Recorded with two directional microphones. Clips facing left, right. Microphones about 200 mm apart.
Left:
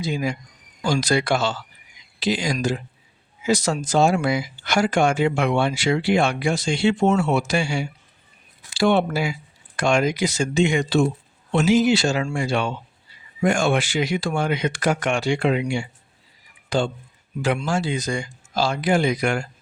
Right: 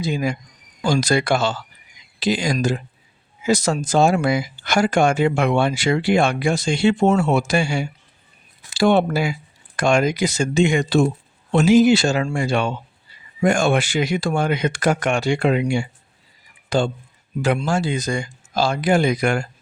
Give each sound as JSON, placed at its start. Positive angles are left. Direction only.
{"t": 0.0, "sound": "speech", "side_deg": -50}